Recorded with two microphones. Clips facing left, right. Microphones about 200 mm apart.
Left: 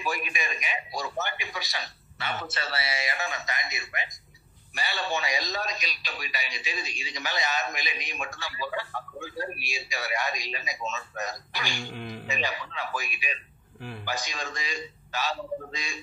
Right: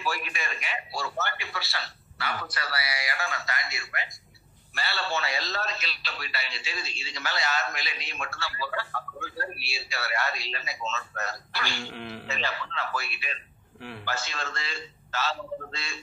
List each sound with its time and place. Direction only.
0.0 s a man's voice: 15° left (ahead or behind)
13.7 s a man's voice: centre (ahead or behind)
14.0 s a man's voice: 15° left (ahead or behind)